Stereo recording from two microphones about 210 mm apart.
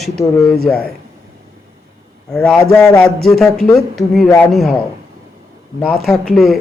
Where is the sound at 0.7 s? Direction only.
10° left (ahead or behind).